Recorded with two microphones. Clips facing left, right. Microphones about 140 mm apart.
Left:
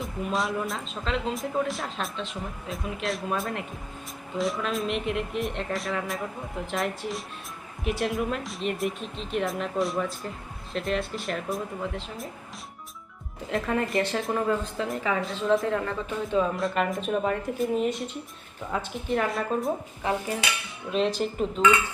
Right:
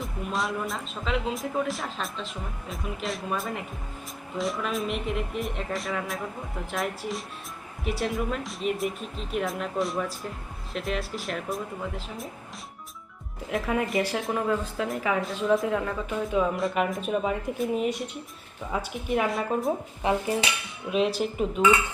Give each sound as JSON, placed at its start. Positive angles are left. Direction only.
{"t": 0.0, "sound": "speech", "side_deg": 0}
{"t": 13.5, "sound": "a woman's voice", "side_deg": -5}
{"t": 20.0, "sound": "cutlery", "side_deg": -20}
{"t": 20.9, "sound": "a woman's voice", "side_deg": -5}